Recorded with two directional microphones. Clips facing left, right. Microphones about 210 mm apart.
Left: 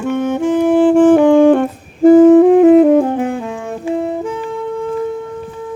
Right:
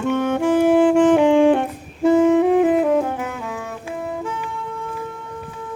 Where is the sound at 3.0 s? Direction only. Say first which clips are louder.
Left 8 dB; 30° left (ahead or behind).